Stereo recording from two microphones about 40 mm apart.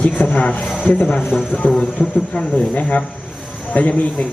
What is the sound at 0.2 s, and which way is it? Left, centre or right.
A man's voice, left.